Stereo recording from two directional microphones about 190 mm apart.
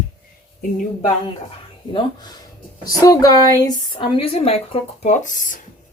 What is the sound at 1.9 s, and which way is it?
A woman's voice, 20° left (ahead or behind).